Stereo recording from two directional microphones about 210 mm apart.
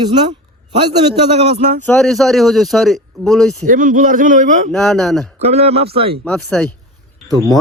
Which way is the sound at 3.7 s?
40° right (ahead or behind).